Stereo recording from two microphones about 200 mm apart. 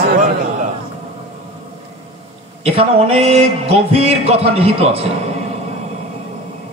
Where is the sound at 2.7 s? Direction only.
30° right (ahead or behind).